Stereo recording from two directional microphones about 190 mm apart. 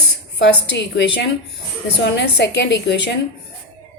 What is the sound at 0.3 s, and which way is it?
A woman's voice, 65° left (ahead or behind).